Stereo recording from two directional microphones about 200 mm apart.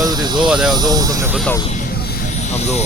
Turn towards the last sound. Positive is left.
turn(degrees=-20)  # may be behind; listen again after turning